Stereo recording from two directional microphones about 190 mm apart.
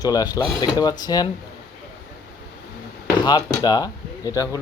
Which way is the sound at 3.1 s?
20° left (ahead or behind).